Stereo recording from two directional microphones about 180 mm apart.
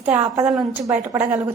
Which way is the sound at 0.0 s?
10° right (ahead or behind).